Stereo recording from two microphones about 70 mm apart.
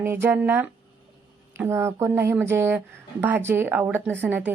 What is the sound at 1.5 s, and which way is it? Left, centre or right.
A woman's voice, right.